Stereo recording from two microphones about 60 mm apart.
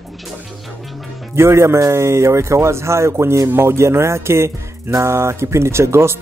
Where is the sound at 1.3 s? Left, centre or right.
Right.